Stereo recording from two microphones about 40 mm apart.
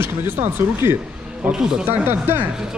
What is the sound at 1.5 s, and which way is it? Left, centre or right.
Speech, centre.